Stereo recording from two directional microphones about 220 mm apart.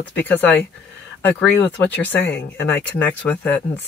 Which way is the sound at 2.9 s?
5° left (ahead or behind).